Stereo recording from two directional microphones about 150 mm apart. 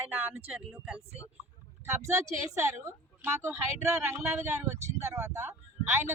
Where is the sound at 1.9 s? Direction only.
20° right (ahead or behind).